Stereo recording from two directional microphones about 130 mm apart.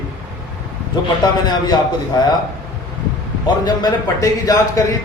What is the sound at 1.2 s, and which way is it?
A man's voice, 30° left (ahead or behind).